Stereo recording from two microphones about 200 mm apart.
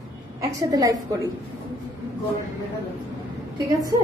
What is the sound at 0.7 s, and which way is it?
Speech, 20° right (ahead or behind).